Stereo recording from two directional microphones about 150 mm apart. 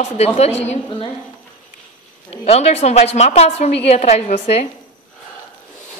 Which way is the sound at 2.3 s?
45° left (ahead or behind).